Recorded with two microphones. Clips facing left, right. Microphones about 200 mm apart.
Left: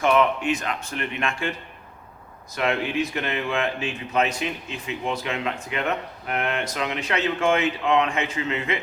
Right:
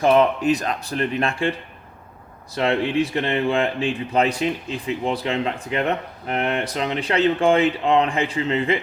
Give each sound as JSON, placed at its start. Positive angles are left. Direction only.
{"t": 0.0, "sound": "speech", "side_deg": -35}
{"t": 2.6, "sound": "speech", "side_deg": -30}